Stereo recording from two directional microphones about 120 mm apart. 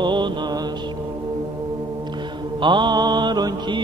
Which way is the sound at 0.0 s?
40° right (ahead or behind).